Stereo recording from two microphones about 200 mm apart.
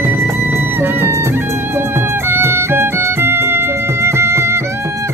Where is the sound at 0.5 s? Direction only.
10° right (ahead or behind).